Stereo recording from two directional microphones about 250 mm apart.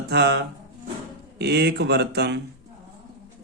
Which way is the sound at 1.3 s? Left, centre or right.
Right.